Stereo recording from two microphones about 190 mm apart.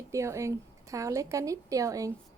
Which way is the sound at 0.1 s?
15° right (ahead or behind).